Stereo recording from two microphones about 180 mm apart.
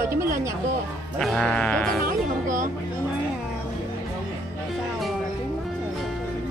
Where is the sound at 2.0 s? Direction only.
45° right (ahead or behind).